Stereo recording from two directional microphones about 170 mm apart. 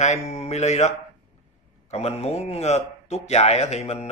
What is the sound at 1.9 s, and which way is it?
Speech, 40° left (ahead or behind).